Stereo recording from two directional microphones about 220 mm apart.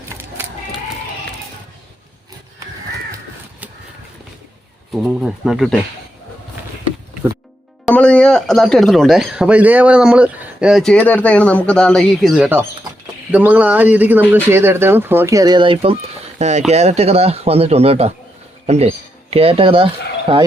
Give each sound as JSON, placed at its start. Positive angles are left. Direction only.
{"t": 0.1, "sound": "a sound", "side_deg": -10}
{"t": 4.9, "sound": "speech", "side_deg": 0}
{"t": 7.9, "sound": "speech", "side_deg": 5}